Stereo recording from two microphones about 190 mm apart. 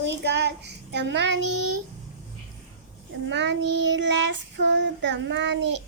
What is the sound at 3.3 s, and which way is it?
Child singing, 65° right (ahead or behind).